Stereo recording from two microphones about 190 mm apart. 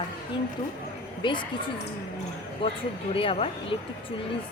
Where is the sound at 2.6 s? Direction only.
30° left (ahead or behind).